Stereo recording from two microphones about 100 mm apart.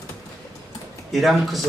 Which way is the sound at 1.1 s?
Centre (ahead or behind).